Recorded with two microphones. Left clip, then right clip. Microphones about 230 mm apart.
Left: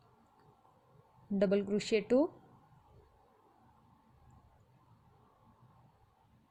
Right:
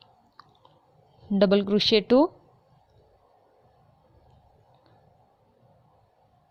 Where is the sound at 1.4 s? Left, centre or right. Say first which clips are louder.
Right 11 dB; right.